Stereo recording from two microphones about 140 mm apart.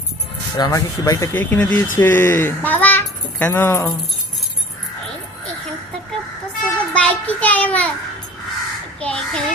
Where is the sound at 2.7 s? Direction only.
15° left (ahead or behind).